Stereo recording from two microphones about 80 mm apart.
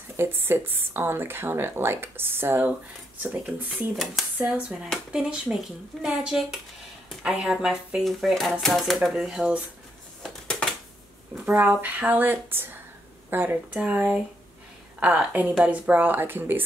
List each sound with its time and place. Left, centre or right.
0.2 s speech: right
3.9 s speech: centre
5.1 s speech: centre
10.2 s a sound: centre
11.4 s speech: centre